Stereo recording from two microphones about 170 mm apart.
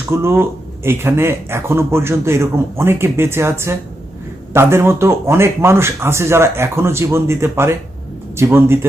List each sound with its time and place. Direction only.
0.1 s speech: 15° right (ahead or behind)